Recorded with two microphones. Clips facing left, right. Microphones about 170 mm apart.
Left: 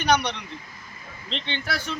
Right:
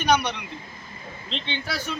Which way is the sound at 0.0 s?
10° right (ahead or behind).